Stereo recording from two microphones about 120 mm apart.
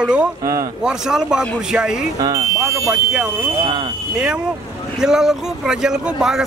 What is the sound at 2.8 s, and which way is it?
Speech, 5° right (ahead or behind).